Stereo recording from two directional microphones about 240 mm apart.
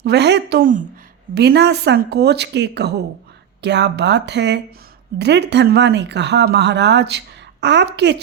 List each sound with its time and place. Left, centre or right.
0.0 s speech: right